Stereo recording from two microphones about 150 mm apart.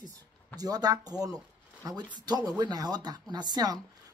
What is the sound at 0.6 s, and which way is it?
A woman's voice, 25° right (ahead or behind).